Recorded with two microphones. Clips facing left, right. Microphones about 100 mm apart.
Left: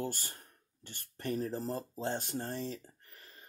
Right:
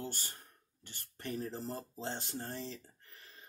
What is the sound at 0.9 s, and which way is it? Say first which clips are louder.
Speech: left 5 dB; 55° left (ahead or behind).